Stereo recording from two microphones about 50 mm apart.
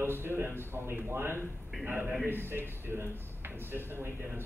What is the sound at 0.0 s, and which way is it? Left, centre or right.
A man's voice, right.